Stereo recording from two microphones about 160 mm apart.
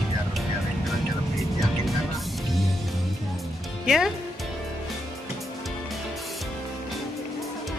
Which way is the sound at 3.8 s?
Centre (ahead or behind).